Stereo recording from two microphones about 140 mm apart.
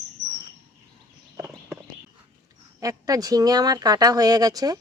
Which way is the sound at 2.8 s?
25° right (ahead or behind).